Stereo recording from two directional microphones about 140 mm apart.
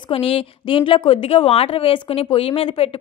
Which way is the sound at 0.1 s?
40° left (ahead or behind).